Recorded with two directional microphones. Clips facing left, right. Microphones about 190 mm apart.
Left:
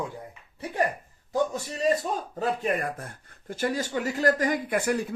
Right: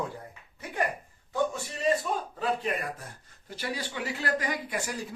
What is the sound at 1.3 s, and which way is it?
Speech, 40° left (ahead or behind).